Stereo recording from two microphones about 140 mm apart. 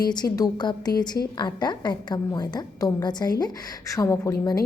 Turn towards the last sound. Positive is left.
turn(degrees=25)  # may be behind; listen again after turning